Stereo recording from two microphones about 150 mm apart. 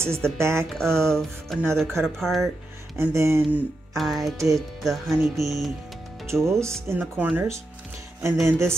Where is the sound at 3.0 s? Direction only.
20° right (ahead or behind).